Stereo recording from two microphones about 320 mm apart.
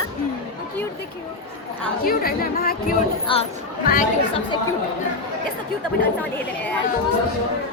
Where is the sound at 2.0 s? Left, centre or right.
Left.